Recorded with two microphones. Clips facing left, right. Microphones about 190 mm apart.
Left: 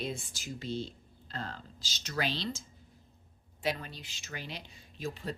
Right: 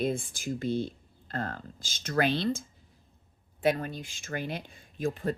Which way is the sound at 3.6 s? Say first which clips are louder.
Right 8 dB; 50° right (ahead or behind).